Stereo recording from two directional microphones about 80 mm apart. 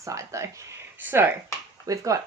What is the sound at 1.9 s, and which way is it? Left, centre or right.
Speech, right.